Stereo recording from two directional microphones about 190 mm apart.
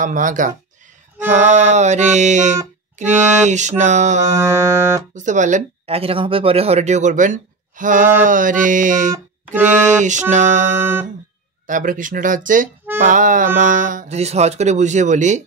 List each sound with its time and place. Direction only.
0.0 s speech: 45° right (ahead or behind)
4.4 s music: 15° right (ahead or behind)
5.1 s speech: 40° right (ahead or behind)